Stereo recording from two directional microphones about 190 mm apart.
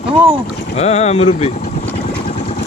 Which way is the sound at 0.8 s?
35° left (ahead or behind).